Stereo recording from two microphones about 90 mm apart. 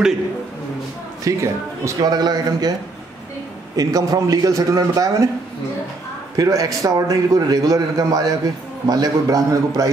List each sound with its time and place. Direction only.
1.2 s a man's voice: 35° right (ahead or behind)
2.0 s a man's voice: 50° right (ahead or behind)
3.7 s a man's voice: 45° right (ahead or behind)
6.3 s a man's voice: 40° right (ahead or behind)